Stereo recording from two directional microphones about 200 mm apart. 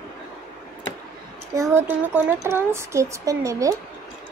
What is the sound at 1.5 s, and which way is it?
Speech, 15° right (ahead or behind).